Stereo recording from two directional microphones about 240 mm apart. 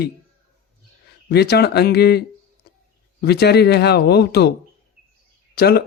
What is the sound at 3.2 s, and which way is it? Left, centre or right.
Speech, left.